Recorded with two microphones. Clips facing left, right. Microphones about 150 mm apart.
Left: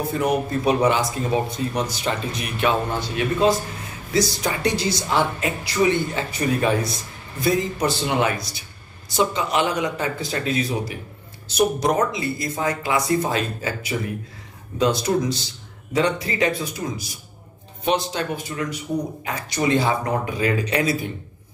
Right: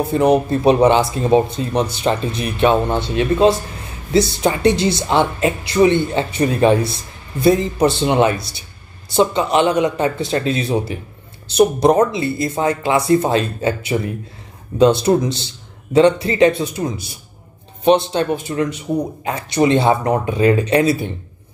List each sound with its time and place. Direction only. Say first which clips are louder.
0.0 s speech: right 7 dB; 25° right (ahead or behind)